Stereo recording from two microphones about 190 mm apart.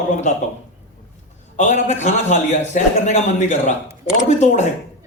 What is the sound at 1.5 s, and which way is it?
A man's voice, 40° left (ahead or behind).